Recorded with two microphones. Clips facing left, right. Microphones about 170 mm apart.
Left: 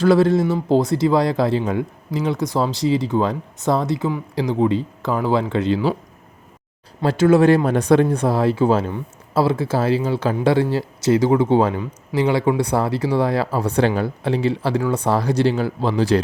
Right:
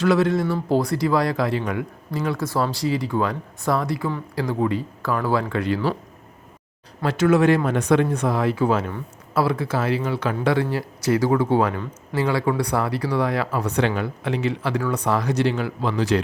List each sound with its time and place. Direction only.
0.0 s speech: 30° left (ahead or behind)
7.0 s speech: 30° left (ahead or behind)